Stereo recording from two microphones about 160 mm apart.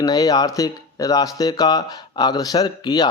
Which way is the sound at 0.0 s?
25° left (ahead or behind).